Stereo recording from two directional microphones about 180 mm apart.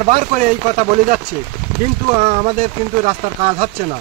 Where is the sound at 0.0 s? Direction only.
40° right (ahead or behind).